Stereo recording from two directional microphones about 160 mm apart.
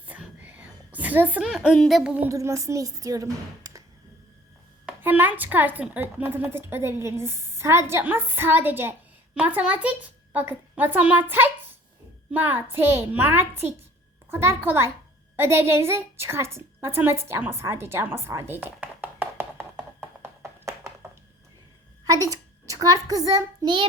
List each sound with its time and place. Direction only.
0.1 s whispering: 10° right (ahead or behind)
2.3 s speech: 20° right (ahead or behind)
4.9 s a woman's voice: 10° right (ahead or behind)
15.4 s a sound: 15° right (ahead or behind)
22.0 s a child's voice: 20° right (ahead or behind)